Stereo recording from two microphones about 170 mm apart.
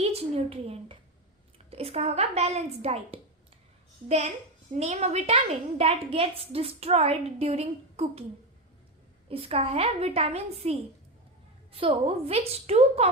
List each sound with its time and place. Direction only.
0.0 s a woman's voice: 35° right (ahead or behind)
4.7 s a woman's voice: 40° right (ahead or behind)
9.3 s a woman's voice: 35° right (ahead or behind)